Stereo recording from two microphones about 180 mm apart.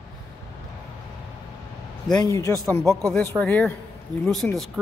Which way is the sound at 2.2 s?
20° left (ahead or behind).